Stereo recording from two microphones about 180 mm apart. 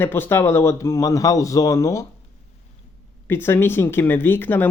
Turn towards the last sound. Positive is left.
turn(degrees=10)  # may be behind; listen again after turning